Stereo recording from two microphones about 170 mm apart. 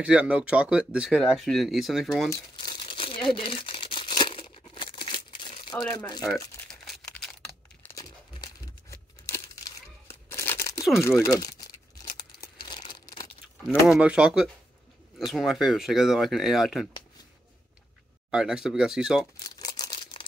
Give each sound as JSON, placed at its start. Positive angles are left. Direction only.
{"t": 0.0, "sound": "speech", "side_deg": -5}
{"t": 2.5, "sound": "crumpling", "side_deg": 30}
{"t": 5.9, "sound": "speech", "side_deg": 25}
{"t": 6.3, "sound": "crumpling", "side_deg": 0}
{"t": 7.8, "sound": "tearing", "side_deg": 20}
{"t": 11.1, "sound": "crumpling", "side_deg": 20}
{"t": 13.7, "sound": "speech", "side_deg": -5}
{"t": 18.3, "sound": "speech", "side_deg": -5}
{"t": 19.4, "sound": "a sound", "side_deg": 25}